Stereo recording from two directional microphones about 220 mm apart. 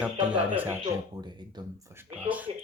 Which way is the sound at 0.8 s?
20° right (ahead or behind).